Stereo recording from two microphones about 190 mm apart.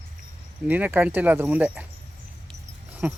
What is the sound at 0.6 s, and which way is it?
Speech, 10° right (ahead or behind).